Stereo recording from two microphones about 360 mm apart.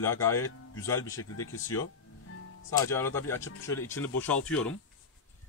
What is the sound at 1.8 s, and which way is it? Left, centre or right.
Music, left.